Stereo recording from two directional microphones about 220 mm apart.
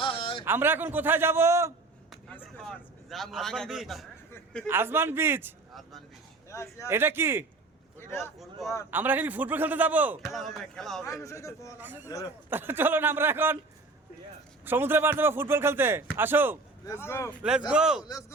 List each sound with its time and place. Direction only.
0.0 s a sound: 25° left (ahead or behind)
0.4 s speech: 10° right (ahead or behind)
2.3 s a man's voice: centre (ahead or behind)
6.5 s speech: 15° left (ahead or behind)
6.8 s speech: 10° right (ahead or behind)
7.9 s speech: 10° left (ahead or behind)
8.9 s speech: 10° right (ahead or behind)
11.0 s a man's voice: 15° left (ahead or behind)
12.5 s speech: 10° right (ahead or behind)
14.6 s speech: 10° right (ahead or behind)
16.8 s a man's voice: 10° left (ahead or behind)
17.7 s speech: 5° right (ahead or behind)
18.1 s a man's voice: 15° left (ahead or behind)